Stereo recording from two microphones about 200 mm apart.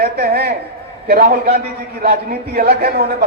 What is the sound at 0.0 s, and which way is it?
A man's voice, 50° right (ahead or behind).